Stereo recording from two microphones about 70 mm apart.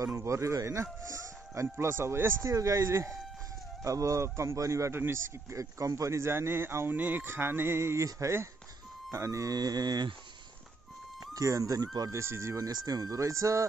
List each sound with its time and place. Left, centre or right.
0.0 s speech: right
2.5 s a man's voice: right
6.9 s a man's voice: right
9.6 s speech: right
11.3 s speech: right
12.1 s speech: right